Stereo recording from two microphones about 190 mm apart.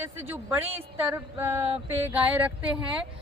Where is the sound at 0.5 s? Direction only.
10° right (ahead or behind).